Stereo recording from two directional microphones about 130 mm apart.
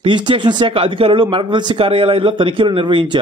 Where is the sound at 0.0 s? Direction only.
40° right (ahead or behind).